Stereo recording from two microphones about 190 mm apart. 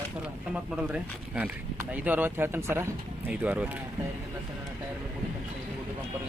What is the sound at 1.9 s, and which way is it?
Speech, 10° right (ahead or behind).